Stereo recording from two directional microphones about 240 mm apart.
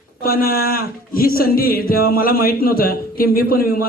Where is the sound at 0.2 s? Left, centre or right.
Left.